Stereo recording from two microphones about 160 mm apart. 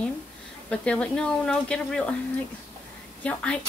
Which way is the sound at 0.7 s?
5° left (ahead or behind).